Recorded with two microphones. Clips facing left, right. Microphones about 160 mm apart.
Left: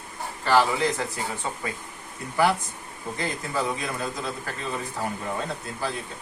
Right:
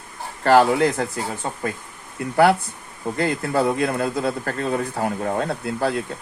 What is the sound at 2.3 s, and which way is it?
A man's voice, 65° right (ahead or behind).